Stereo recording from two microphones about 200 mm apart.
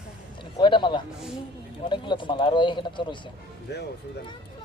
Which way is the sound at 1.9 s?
25° left (ahead or behind).